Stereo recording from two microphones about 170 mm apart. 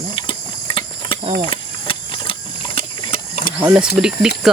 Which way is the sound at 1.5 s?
30° left (ahead or behind).